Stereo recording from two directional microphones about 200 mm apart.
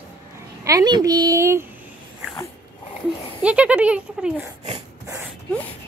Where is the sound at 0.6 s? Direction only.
15° right (ahead or behind).